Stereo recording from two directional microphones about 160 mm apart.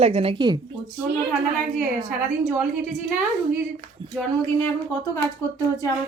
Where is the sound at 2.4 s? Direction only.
20° right (ahead or behind).